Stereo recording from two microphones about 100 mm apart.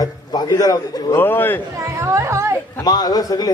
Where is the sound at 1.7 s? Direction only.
30° right (ahead or behind).